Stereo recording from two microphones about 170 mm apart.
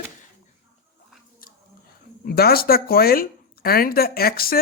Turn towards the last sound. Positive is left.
turn(degrees=60)  # may be behind; listen again after turning